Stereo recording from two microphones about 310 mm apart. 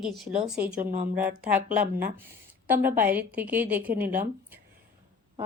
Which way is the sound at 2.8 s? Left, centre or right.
Right.